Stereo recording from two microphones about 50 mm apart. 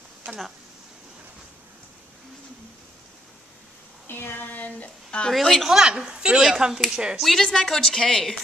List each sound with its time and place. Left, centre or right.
4.1 s speech: left
5.3 s a woman's voice: centre
5.7 s speech: centre
7.4 s speech: centre